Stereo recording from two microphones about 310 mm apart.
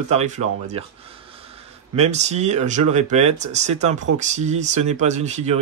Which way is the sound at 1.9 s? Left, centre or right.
Right.